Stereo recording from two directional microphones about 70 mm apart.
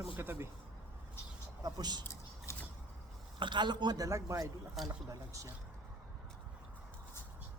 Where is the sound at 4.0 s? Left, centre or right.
Right.